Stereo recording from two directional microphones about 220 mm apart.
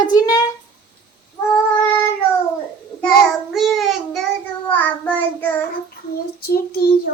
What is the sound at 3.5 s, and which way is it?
A woman's voice, centre (ahead or behind).